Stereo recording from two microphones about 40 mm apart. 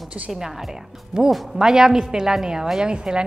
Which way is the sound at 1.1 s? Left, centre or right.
Centre.